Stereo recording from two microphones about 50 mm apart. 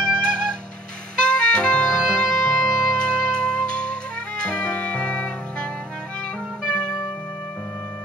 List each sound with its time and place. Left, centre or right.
0.0 s music: centre
1.3 s music: centre